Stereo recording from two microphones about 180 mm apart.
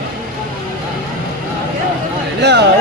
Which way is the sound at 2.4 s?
70° right (ahead or behind).